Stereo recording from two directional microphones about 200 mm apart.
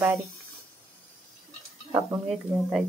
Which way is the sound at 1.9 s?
15° right (ahead or behind).